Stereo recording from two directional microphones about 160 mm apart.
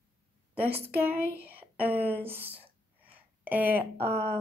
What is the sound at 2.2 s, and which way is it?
A woman's voice, 15° right (ahead or behind).